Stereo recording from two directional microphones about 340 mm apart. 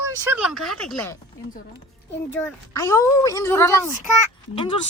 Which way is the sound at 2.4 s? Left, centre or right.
Centre.